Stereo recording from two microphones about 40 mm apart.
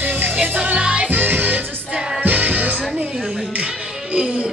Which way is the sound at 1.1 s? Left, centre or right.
Right.